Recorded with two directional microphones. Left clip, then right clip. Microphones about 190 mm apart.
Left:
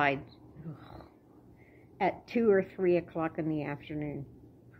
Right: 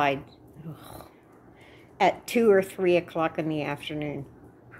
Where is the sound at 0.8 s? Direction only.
15° right (ahead or behind).